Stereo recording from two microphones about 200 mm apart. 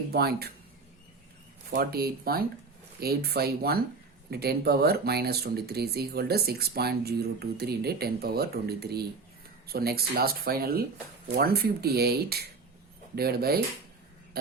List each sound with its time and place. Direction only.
0.1 s speech: 50° right (ahead or behind)
1.7 s speech: 50° right (ahead or behind)